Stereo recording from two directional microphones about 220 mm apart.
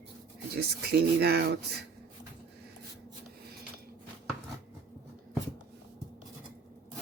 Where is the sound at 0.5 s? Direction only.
45° right (ahead or behind).